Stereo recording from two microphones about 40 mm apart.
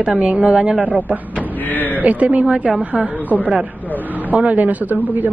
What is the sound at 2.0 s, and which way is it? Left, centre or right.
Speech, right.